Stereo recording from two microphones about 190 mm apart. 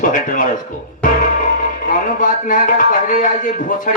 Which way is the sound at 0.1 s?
45° left (ahead or behind).